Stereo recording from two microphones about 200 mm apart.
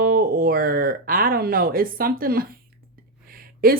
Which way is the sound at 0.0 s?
45° right (ahead or behind).